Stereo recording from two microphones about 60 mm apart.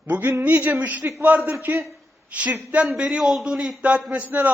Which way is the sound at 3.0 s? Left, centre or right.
Centre.